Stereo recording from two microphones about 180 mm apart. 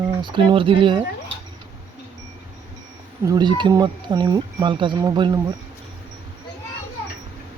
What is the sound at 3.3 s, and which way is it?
Speech, 25° right (ahead or behind).